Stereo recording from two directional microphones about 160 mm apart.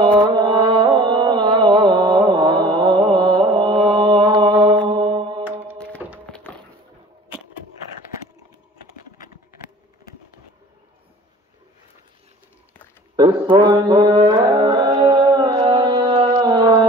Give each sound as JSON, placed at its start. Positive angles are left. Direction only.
{"t": 0.0, "sound": "music", "side_deg": -30}
{"t": 5.4, "sound": "music", "side_deg": -10}
{"t": 13.1, "sound": "mantra", "side_deg": -25}
{"t": 14.9, "sound": "a sound", "side_deg": -30}
{"t": 15.7, "sound": "music", "side_deg": -25}